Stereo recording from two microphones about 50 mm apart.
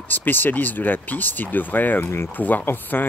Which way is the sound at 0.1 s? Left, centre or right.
Left.